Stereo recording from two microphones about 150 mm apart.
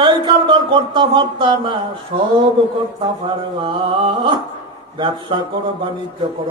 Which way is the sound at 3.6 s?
30° right (ahead or behind).